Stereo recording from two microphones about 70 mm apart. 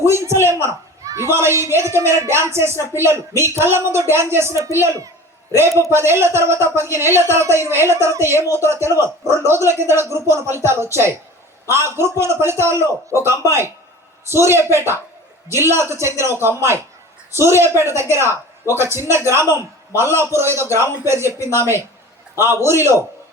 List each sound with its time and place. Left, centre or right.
0.0 s a child's voice: right